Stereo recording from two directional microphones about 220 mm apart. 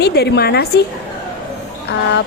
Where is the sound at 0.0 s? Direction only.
50° left (ahead or behind).